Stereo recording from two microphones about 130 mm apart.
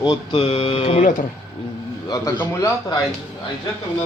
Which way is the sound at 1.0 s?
90° left.